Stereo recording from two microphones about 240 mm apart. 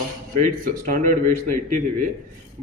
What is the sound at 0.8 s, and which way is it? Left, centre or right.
Speech, right.